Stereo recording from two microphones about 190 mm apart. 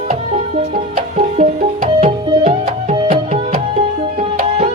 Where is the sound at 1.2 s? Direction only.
40° right (ahead or behind).